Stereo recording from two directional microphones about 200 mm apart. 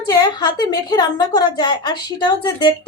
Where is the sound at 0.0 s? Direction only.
20° left (ahead or behind).